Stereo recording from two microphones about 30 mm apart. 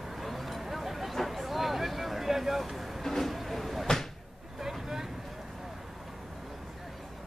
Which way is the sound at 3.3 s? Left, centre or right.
Centre.